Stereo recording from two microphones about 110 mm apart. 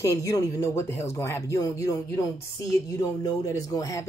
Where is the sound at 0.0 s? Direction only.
30° left (ahead or behind).